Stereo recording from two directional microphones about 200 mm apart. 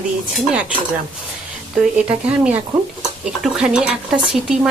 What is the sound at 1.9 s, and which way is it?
Speech, 5° right (ahead or behind).